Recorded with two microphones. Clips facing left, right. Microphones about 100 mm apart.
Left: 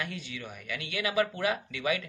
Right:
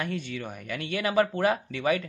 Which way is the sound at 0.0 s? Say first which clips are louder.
Right 6 dB; 45° right (ahead or behind).